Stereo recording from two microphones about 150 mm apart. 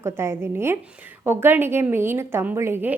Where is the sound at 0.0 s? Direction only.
15° right (ahead or behind).